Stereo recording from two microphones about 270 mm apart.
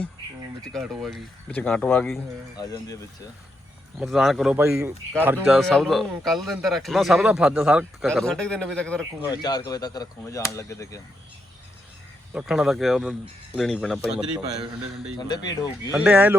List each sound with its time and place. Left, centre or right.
0.6 s speech: centre
3.9 s speech: centre
9.2 s speech: centre
12.3 s speech: centre
15.2 s speech: centre
15.9 s speech: centre